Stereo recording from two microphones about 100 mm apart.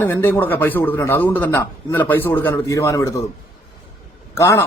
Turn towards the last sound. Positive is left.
turn(degrees=30)  # may be behind; listen again after turning